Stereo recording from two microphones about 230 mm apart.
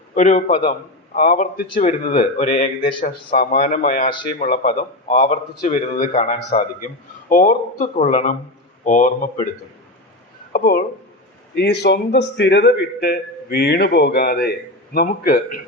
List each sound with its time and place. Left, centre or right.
0.1 s speech: left
10.5 s a man's voice: left